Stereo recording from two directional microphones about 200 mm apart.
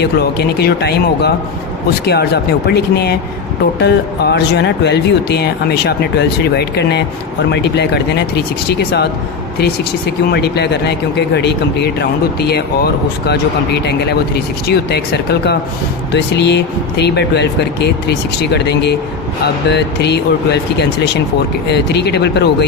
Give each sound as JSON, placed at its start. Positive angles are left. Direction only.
{"t": 0.0, "sound": "speech", "side_deg": 55}
{"t": 10.3, "sound": "speech", "side_deg": 55}